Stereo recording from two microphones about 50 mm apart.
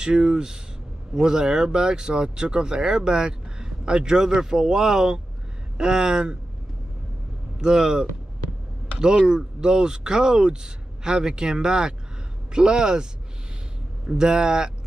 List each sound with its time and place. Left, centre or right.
0.0 s speech: centre
7.5 s speech: centre